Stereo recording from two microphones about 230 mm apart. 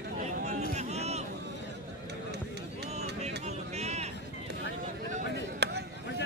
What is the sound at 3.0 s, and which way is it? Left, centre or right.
Music, right.